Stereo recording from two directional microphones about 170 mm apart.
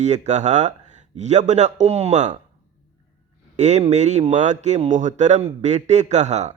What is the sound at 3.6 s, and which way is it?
Speech, 45° right (ahead or behind).